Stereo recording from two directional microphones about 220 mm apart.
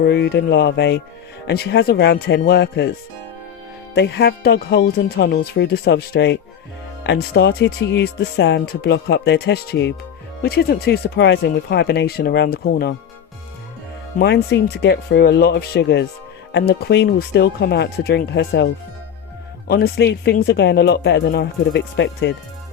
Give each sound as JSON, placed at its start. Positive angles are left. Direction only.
{"t": 0.0, "sound": "speech", "side_deg": 50}
{"t": 3.9, "sound": "speech", "side_deg": 50}
{"t": 14.2, "sound": "speech", "side_deg": 45}